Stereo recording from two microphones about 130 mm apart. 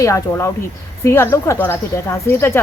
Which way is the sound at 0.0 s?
25° left (ahead or behind).